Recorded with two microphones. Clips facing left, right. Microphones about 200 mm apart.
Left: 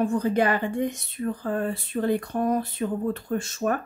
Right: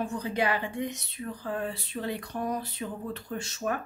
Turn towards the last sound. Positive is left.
turn(degrees=50)  # may be behind; listen again after turning